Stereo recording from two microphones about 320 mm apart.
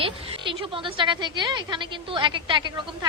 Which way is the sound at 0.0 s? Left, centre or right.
Centre.